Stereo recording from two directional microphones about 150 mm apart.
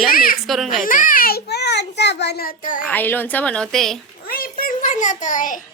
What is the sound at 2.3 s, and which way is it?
Speech, 75° left (ahead or behind).